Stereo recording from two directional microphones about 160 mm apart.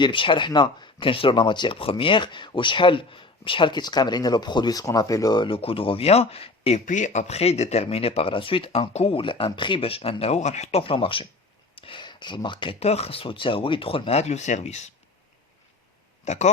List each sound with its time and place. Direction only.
0.0 s speech: 30° left (ahead or behind)
6.8 s speech: 50° left (ahead or behind)
16.2 s speech: 45° left (ahead or behind)